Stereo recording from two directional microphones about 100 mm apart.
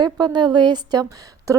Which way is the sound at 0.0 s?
45° right (ahead or behind).